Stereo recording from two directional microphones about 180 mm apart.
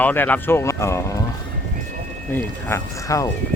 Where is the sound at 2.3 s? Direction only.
15° left (ahead or behind).